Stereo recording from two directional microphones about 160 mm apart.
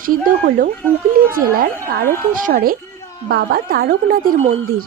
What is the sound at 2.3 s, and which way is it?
A woman's voice, 60° right (ahead or behind).